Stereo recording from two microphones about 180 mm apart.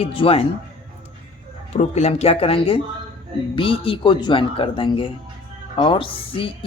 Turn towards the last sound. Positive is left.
turn(degrees=30)  # may be behind; listen again after turning